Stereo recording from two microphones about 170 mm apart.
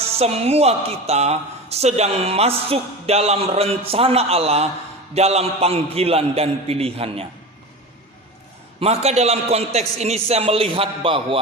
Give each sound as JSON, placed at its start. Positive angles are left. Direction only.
{"t": 0.0, "sound": "a woman's voice", "side_deg": -35}
{"t": 8.8, "sound": "a woman's voice", "side_deg": -35}